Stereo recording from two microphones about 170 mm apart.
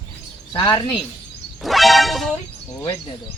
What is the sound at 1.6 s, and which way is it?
Speech, centre (ahead or behind).